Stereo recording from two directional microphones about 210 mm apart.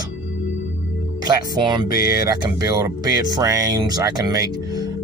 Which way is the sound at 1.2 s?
20° right (ahead or behind).